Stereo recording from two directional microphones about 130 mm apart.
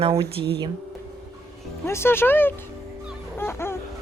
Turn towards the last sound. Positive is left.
turn(degrees=20)  # may be behind; listen again after turning